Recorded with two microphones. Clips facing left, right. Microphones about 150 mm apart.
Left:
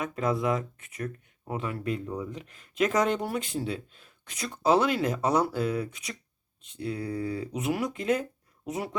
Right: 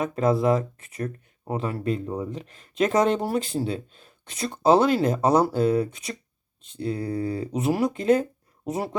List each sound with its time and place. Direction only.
0.0 s speech: 35° right (ahead or behind)